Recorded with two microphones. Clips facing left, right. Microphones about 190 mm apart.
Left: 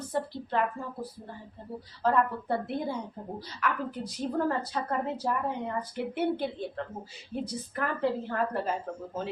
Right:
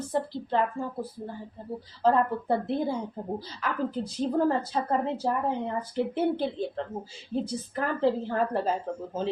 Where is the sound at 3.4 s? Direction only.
30° right (ahead or behind).